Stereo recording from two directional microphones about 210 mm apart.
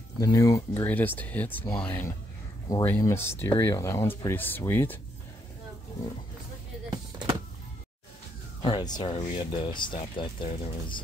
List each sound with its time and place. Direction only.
0.2 s speech: 15° left (ahead or behind)
8.6 s speech: 20° left (ahead or behind)